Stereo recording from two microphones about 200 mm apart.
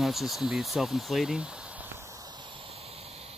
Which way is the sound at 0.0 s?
Centre (ahead or behind).